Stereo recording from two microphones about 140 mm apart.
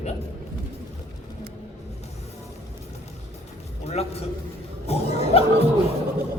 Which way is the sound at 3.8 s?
50° left (ahead or behind).